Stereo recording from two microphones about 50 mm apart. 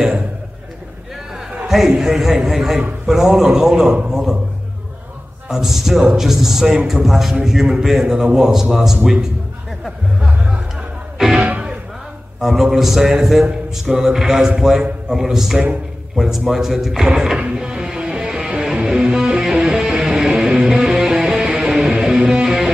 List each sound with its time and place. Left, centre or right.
1.7 s a man's voice: centre
5.5 s a man's voice: centre
10.2 s music: centre
11.1 s music: centre
11.4 s music: right
12.4 s a man's voice: centre
17.6 s music: centre